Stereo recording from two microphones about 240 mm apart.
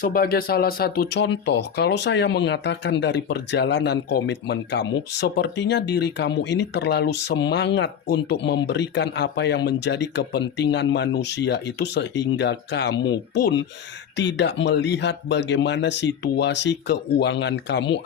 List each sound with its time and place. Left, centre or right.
0.0 s speech: left